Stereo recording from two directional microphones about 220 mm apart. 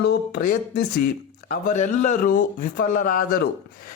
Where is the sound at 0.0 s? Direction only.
50° left (ahead or behind).